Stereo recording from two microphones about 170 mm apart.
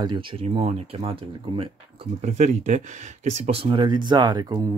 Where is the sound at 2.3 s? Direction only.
45° right (ahead or behind).